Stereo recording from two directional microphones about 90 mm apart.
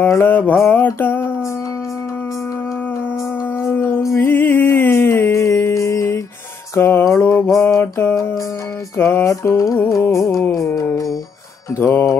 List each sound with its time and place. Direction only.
0.1 s mantra: 25° left (ahead or behind)
3.7 s music: 25° left (ahead or behind)
6.7 s mantra: 25° left (ahead or behind)
8.9 s music: 30° left (ahead or behind)
11.8 s mantra: 30° left (ahead or behind)